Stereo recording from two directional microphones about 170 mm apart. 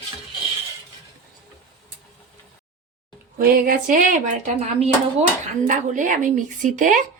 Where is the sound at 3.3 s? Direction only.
60° right (ahead or behind).